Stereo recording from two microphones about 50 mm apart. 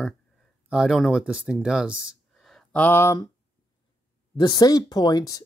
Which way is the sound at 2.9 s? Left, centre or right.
Left.